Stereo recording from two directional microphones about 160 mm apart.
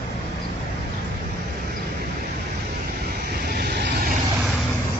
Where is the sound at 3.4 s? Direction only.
90° right.